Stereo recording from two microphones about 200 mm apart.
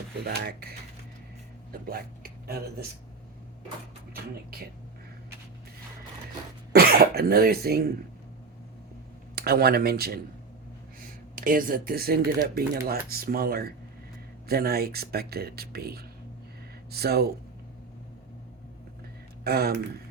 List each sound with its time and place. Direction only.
0.3 s speech: 50° right (ahead or behind)
1.7 s speech: 50° right (ahead or behind)
6.7 s speech: 50° right (ahead or behind)
9.3 s speech: 50° right (ahead or behind)
11.3 s speech: 45° right (ahead or behind)
19.5 s speech: 50° right (ahead or behind)